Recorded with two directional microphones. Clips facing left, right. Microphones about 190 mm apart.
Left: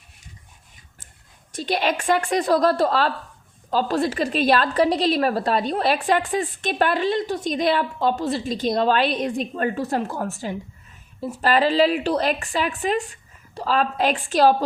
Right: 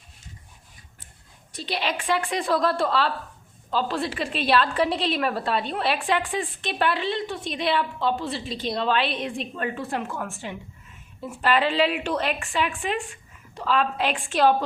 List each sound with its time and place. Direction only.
1.5 s a woman's voice: 45° left (ahead or behind)